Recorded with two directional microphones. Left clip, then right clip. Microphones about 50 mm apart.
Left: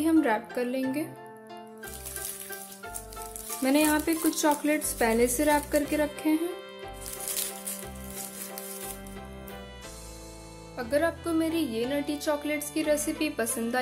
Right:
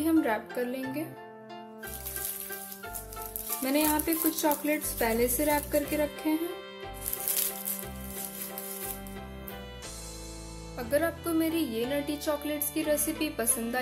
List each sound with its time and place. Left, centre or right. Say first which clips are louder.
0.0 s speech: left 2 dB; left
3.6 s a woman's voice: left 3 dB; left
5.9 s speech: left 2 dB; left
7.2 s music: even; centre
11.2 s music: left 1 dB; centre
11.8 s speech: left 1 dB; centre
12.1 s music: left 2 dB; centre
12.4 s speech: left 2 dB; left
13.1 s a woman's voice: left 2 dB; left